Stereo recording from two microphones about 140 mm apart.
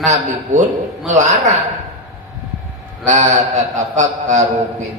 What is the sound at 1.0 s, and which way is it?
Speech, 60° right (ahead or behind).